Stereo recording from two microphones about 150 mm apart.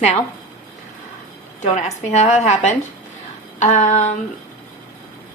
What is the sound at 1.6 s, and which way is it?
A woman's voice, 50° left (ahead or behind).